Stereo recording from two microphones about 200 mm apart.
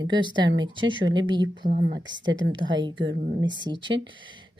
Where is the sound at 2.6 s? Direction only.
20° right (ahead or behind).